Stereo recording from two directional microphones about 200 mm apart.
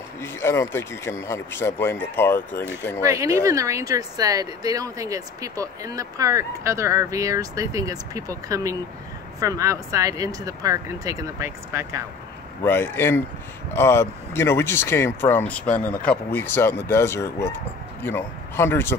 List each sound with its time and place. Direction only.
0.2 s speech: 10° left (ahead or behind)
3.0 s speech: 15° right (ahead or behind)
12.6 s speech: 10° left (ahead or behind)